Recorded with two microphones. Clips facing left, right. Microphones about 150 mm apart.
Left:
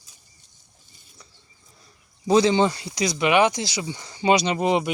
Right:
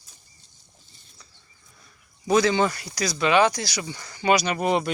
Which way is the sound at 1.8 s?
30° left (ahead or behind).